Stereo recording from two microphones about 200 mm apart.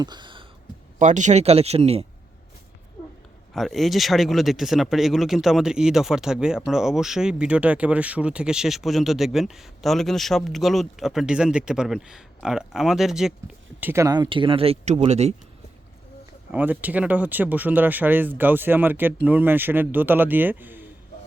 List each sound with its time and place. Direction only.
0.0 s a sound: 20° right (ahead or behind)
0.9 s speech: 35° right (ahead or behind)
3.5 s speech: centre (ahead or behind); by 15.4 s 30° right (ahead or behind)
16.5 s speech: 10° right (ahead or behind)